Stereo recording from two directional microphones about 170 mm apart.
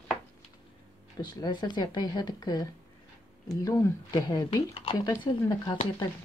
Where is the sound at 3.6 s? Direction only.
15° left (ahead or behind).